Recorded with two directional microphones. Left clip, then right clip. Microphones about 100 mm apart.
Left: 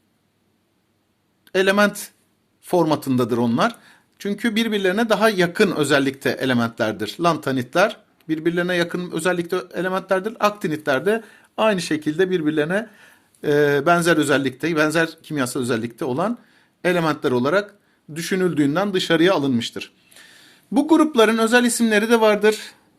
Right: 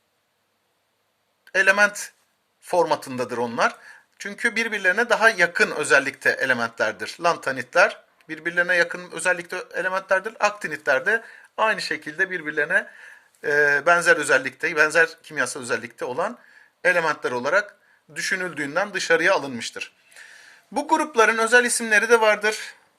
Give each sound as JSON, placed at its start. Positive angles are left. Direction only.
{"t": 1.5, "sound": "speech", "side_deg": 0}
{"t": 12.4, "sound": "speech", "side_deg": 25}
{"t": 12.7, "sound": "speech", "side_deg": 5}